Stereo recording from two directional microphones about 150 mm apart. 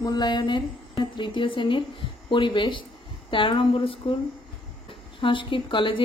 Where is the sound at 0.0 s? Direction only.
30° left (ahead or behind).